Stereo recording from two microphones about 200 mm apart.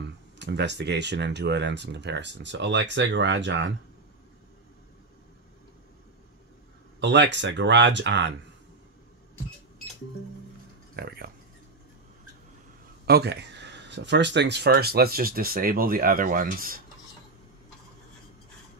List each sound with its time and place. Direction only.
0.0 s speech: 60° right (ahead or behind)
7.0 s speech: 60° right (ahead or behind)
11.0 s speech: 50° right (ahead or behind)
13.0 s speech: 55° right (ahead or behind)